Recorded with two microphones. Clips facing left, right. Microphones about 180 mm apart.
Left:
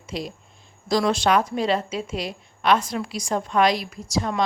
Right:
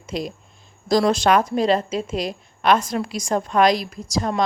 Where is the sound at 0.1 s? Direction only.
45° right (ahead or behind).